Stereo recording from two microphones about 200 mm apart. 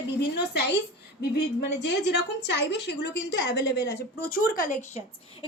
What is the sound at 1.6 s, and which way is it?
A woman's voice, 55° left (ahead or behind).